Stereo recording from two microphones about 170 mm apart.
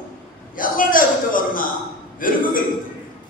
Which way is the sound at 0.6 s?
55° left (ahead or behind).